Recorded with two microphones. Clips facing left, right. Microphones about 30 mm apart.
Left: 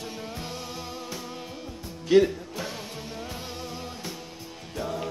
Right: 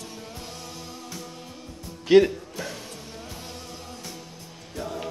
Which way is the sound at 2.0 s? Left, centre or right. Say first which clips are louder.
Right 3 dB; right.